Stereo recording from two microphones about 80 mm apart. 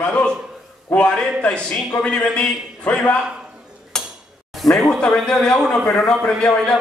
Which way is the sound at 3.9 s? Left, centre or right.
Centre.